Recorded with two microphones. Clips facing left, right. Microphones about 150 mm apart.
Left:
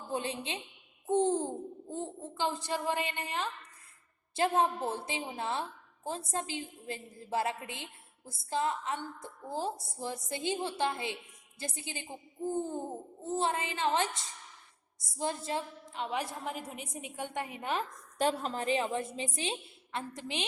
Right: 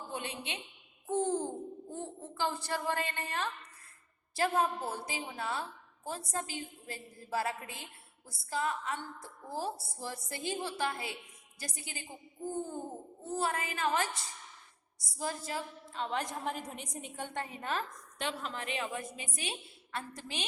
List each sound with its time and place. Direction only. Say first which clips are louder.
0.1 s a woman's voice: left 7 dB; 30° left (ahead or behind)
13.2 s a woman's voice: left 2 dB; 25° left (ahead or behind)
16.0 s a woman's voice: even; 5° left (ahead or behind)
18.2 s a woman's voice: left 7 dB; 40° left (ahead or behind); by 20.4 s 20° left (ahead or behind)